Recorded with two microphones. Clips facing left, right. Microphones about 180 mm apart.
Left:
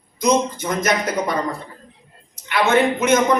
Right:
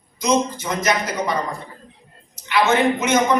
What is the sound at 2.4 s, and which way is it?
Speech, 55° left (ahead or behind).